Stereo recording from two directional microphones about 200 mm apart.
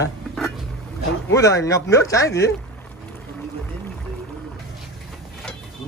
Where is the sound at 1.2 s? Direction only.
15° left (ahead or behind).